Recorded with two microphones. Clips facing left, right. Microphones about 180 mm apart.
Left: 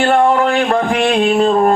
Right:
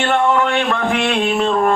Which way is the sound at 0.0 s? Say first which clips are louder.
Left 4 dB; 35° left (ahead or behind).